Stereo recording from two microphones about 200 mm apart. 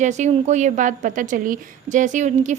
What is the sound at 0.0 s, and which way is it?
A woman's voice, 35° right (ahead or behind).